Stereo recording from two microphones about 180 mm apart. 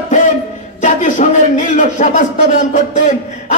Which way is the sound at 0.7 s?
45° left (ahead or behind).